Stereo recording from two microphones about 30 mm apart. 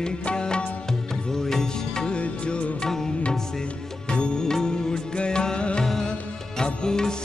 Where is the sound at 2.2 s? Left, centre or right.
Left.